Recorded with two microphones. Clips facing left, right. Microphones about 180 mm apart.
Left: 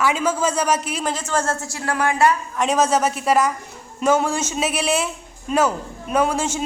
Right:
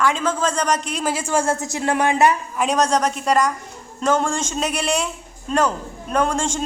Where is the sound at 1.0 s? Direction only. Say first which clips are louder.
Right 2 dB; 10° right (ahead or behind).